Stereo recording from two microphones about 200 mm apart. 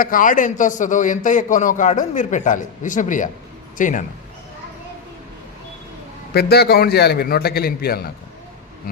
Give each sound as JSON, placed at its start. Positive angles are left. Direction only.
{"t": 0.0, "sound": "a man's voice", "side_deg": 45}
{"t": 6.3, "sound": "a man's voice", "side_deg": 55}